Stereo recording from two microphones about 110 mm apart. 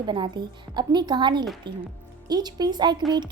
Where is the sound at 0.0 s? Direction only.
45° right (ahead or behind).